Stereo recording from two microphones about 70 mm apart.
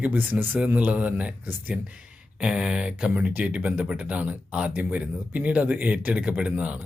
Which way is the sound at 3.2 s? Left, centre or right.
Centre.